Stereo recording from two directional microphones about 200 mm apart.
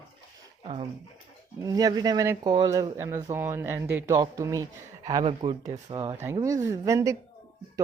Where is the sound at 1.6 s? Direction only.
20° right (ahead or behind).